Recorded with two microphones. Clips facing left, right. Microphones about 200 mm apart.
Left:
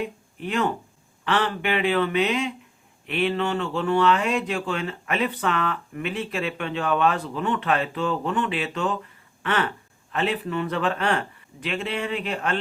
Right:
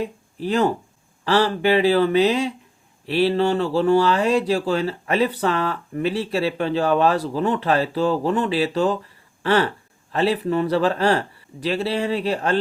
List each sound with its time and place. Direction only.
0.0 s speech: 35° right (ahead or behind)